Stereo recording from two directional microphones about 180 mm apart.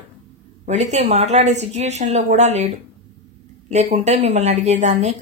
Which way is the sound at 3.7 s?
40° right (ahead or behind).